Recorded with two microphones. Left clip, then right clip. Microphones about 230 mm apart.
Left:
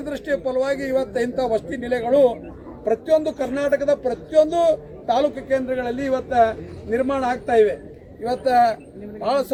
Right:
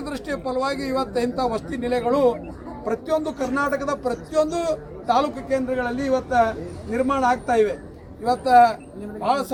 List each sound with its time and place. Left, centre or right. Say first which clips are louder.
0.0 s speech: left 4 dB; centre